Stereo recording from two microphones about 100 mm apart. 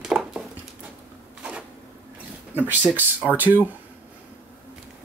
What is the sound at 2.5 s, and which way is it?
Speech, 20° right (ahead or behind).